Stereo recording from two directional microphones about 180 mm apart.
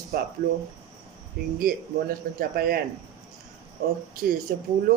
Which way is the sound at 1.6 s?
55° right (ahead or behind).